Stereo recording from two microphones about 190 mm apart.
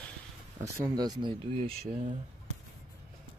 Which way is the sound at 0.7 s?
15° right (ahead or behind).